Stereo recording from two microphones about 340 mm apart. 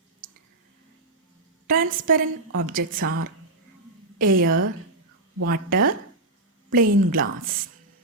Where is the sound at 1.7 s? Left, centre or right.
Right.